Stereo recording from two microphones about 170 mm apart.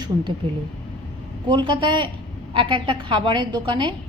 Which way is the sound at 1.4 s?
25° right (ahead or behind).